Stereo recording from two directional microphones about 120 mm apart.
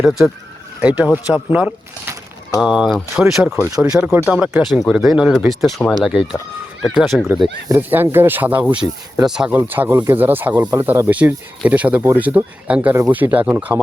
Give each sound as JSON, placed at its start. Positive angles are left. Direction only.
{"t": 0.0, "sound": "speech", "side_deg": -5}
{"t": 3.5, "sound": "speech", "side_deg": -25}
{"t": 3.9, "sound": "speech", "side_deg": -15}
{"t": 7.8, "sound": "speech", "side_deg": -15}
{"t": 9.6, "sound": "speech", "side_deg": -15}